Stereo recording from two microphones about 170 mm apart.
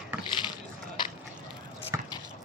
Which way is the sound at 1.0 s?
25° left (ahead or behind).